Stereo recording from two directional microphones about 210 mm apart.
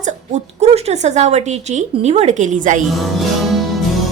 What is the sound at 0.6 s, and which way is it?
Speech, 30° right (ahead or behind).